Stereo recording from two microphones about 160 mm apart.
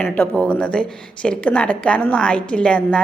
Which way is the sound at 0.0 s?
10° left (ahead or behind).